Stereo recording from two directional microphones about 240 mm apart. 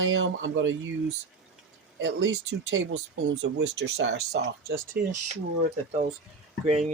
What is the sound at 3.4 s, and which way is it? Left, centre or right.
Speech, right.